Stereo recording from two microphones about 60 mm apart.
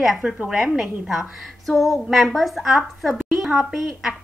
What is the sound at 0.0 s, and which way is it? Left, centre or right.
A woman's voice, centre.